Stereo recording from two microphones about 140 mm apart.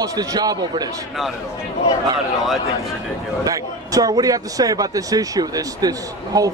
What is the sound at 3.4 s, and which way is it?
A man's voice, 25° right (ahead or behind).